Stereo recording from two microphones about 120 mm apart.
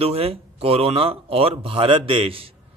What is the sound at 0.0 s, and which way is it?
A man's voice, 55° right (ahead or behind).